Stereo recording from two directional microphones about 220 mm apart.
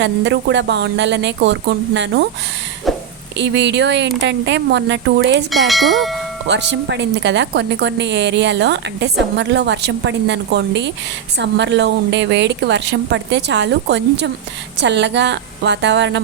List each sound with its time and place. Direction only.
0.0 s a woman's voice: 55° right (ahead or behind)
2.8 s a sound: centre (ahead or behind)
3.3 s a woman's voice: 50° right (ahead or behind)
5.5 s speech: centre (ahead or behind)
6.5 s a woman's voice: 55° right (ahead or behind)